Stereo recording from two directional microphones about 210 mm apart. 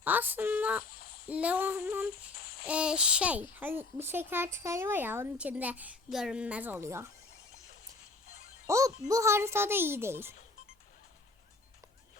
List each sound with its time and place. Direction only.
0.0 s a child's voice: 10° right (ahead or behind)
0.9 s a sound: 45° left (ahead or behind)
1.3 s a child's voice: 5° right (ahead or behind)
2.3 s babbling: 45° left (ahead or behind)
2.6 s a child's voice: 5° right (ahead or behind)
8.6 s a child's voice: 15° right (ahead or behind)